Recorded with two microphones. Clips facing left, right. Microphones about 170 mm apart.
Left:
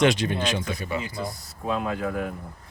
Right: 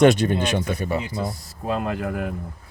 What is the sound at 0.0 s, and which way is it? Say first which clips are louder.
Speech: right 5 dB; 50° right (ahead or behind).